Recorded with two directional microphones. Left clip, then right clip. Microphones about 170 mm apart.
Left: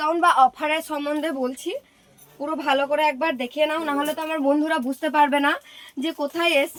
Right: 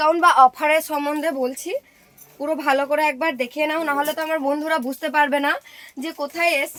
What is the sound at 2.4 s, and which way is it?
Speech, 90° right.